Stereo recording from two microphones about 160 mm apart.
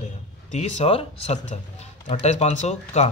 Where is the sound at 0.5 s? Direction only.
45° left (ahead or behind).